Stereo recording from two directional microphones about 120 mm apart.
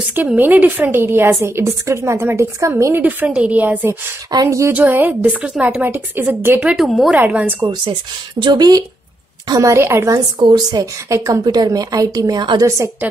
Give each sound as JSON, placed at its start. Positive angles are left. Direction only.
{"t": 0.4, "sound": "a woman's voice", "side_deg": -15}
{"t": 4.3, "sound": "a woman's voice", "side_deg": -30}
{"t": 4.7, "sound": "a woman's voice", "side_deg": -15}
{"t": 6.6, "sound": "a woman's voice", "side_deg": -5}
{"t": 7.2, "sound": "a woman's voice", "side_deg": -15}
{"t": 7.6, "sound": "a woman's voice", "side_deg": -40}
{"t": 10.4, "sound": "a woman's voice", "side_deg": -35}